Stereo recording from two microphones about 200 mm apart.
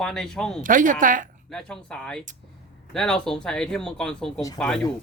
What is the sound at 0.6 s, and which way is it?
Speech, 40° right (ahead or behind).